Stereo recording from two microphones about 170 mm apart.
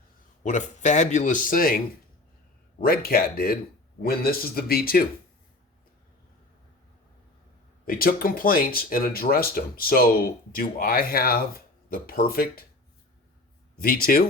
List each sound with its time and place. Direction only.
0.4 s speech: 45° left (ahead or behind)
2.8 s speech: 60° left (ahead or behind)
7.9 s speech: 55° left (ahead or behind)
13.7 s speech: 60° left (ahead or behind)